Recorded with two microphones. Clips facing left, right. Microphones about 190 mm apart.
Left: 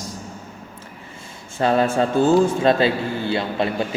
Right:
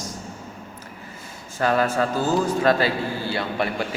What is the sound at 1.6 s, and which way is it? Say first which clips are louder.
A man's voice: left 3 dB; 25° left (ahead or behind).